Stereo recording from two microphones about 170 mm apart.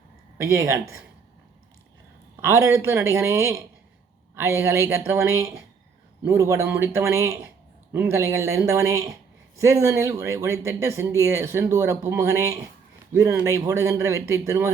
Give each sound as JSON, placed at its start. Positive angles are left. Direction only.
{"t": 0.3, "sound": "speech", "side_deg": -15}
{"t": 2.3, "sound": "speech", "side_deg": -15}